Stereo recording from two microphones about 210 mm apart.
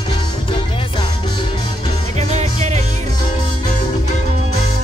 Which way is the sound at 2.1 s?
30° right (ahead or behind).